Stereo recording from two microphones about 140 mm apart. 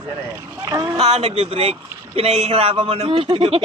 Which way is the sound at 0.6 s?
25° right (ahead or behind).